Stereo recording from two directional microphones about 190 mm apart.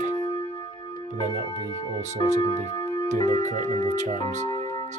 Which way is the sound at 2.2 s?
25° left (ahead or behind).